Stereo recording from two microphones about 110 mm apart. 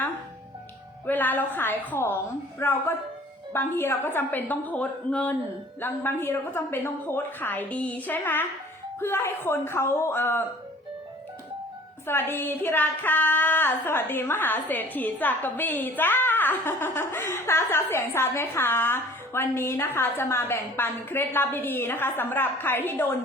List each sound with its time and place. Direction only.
1.0 s a woman's voice: 15° left (ahead or behind)
12.0 s speech: 20° left (ahead or behind)